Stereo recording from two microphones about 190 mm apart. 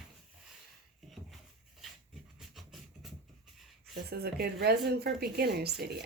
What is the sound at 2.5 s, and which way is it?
Music, centre (ahead or behind).